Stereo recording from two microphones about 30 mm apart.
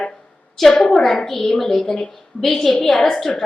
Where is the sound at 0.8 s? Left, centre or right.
Centre.